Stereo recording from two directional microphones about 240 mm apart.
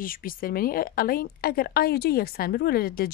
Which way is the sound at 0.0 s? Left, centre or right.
Left.